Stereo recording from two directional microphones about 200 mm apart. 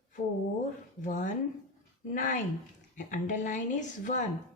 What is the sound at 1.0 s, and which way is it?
A woman's voice, 40° left (ahead or behind).